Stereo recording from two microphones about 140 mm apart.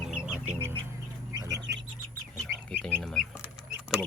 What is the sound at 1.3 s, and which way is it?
Bird, 25° right (ahead or behind).